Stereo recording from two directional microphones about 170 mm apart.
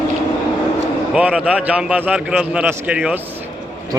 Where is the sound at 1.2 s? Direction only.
10° right (ahead or behind).